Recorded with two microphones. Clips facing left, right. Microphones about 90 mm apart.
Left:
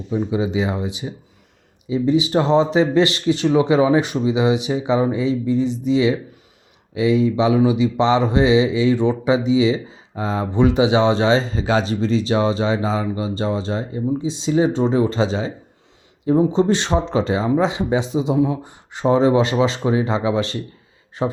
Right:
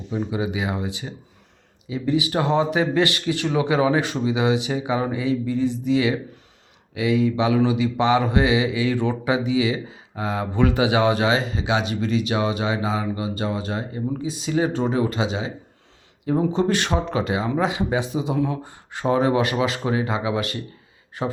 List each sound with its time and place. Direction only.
0.3 s mantra: 25° left (ahead or behind)
16.3 s mantra: 20° left (ahead or behind)